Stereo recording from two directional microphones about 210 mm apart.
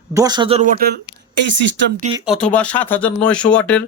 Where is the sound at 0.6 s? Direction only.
45° right (ahead or behind).